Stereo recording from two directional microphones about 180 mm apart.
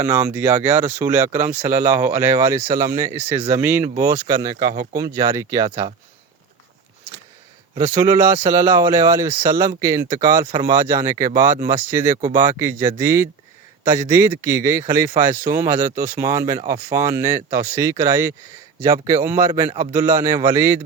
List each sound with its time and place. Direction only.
0.0 s speech: 15° right (ahead or behind)
7.8 s speech: 20° right (ahead or behind)